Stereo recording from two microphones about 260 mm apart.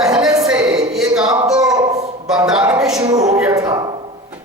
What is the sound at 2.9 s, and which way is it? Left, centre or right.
Speech, centre.